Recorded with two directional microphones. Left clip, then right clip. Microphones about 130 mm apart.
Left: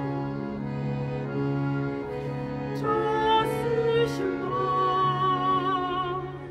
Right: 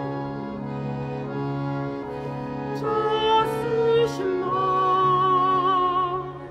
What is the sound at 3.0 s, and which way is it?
Music, 45° right (ahead or behind).